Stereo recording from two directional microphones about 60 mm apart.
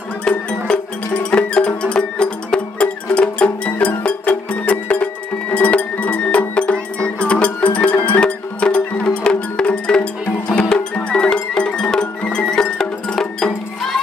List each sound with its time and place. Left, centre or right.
0.3 s music: centre